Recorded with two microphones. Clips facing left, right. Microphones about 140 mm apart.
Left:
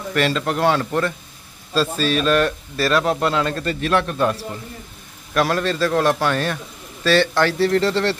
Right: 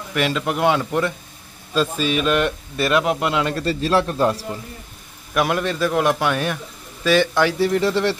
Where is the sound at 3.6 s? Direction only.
30° right (ahead or behind).